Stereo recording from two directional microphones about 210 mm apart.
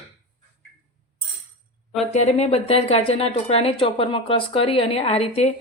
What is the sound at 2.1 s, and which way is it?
Speech, 30° left (ahead or behind).